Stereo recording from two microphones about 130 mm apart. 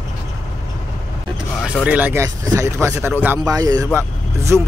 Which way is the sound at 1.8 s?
10° right (ahead or behind).